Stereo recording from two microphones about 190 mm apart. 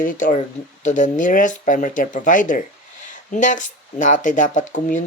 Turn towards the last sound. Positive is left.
turn(degrees=40)  # may be behind; listen again after turning